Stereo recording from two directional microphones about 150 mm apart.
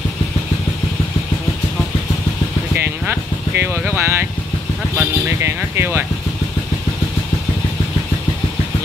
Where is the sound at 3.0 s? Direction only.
15° right (ahead or behind).